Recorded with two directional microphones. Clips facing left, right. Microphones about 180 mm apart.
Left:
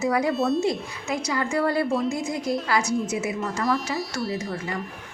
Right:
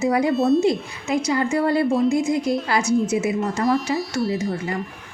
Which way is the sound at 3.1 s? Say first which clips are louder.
Right 6 dB; 25° right (ahead or behind).